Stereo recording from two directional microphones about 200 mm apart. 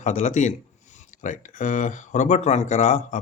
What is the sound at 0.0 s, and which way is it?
Speech, 40° left (ahead or behind).